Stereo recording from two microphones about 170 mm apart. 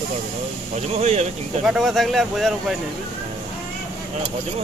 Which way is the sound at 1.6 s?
Centre (ahead or behind).